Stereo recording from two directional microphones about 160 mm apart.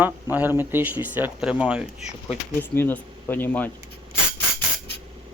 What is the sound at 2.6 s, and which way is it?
Speech, 10° left (ahead or behind).